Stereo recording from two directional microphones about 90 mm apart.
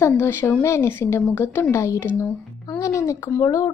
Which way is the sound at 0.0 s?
25° left (ahead or behind).